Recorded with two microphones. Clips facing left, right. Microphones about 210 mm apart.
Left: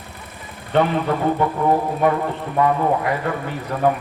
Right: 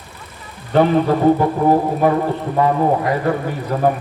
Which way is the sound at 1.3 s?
30° right (ahead or behind).